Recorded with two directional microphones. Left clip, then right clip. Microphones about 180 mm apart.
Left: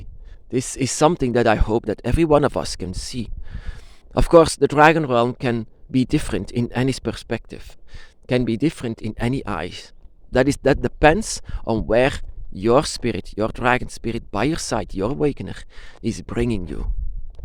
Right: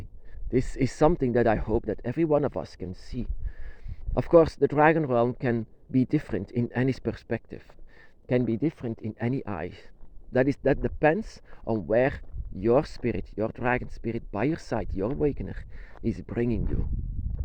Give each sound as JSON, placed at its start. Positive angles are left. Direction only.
{"t": 0.5, "sound": "speech", "side_deg": 25}
{"t": 9.1, "sound": "speech", "side_deg": 35}